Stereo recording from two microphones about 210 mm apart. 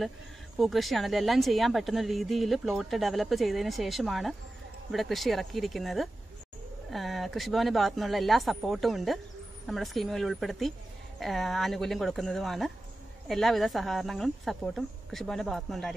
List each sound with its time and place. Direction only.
0.6 s speech: centre (ahead or behind)